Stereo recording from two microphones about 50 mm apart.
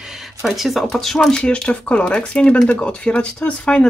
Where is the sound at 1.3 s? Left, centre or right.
Centre.